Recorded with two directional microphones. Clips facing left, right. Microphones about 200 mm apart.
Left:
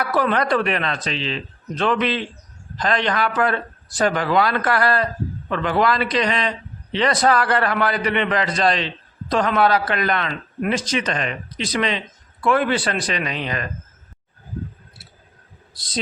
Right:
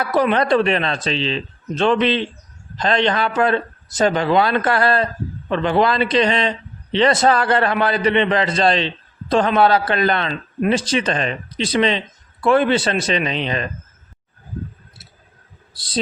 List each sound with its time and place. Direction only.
0.0 s a man's voice: 20° right (ahead or behind)
15.7 s speech: 30° right (ahead or behind)